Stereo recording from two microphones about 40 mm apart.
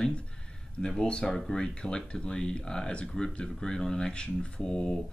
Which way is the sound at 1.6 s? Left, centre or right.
Left.